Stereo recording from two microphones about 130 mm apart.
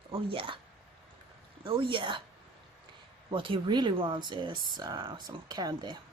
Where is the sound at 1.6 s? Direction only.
40° right (ahead or behind).